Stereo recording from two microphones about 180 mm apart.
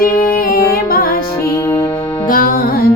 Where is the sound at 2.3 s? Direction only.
55° left (ahead or behind).